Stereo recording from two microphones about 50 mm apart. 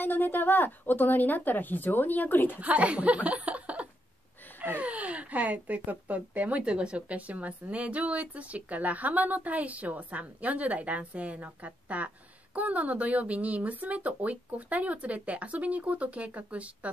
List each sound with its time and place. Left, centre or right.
0.0 s a woman's voice: left
2.6 s a woman's voice: right